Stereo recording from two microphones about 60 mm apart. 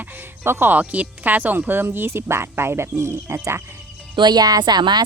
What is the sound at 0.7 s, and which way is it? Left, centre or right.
Speech, right.